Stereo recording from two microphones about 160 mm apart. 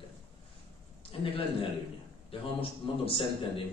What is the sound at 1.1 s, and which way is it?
A man's voice, 35° left (ahead or behind).